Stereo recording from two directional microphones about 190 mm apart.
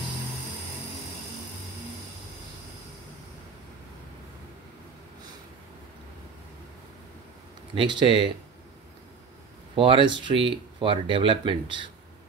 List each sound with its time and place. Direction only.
7.7 s speech: 25° right (ahead or behind)
9.8 s speech: 25° right (ahead or behind)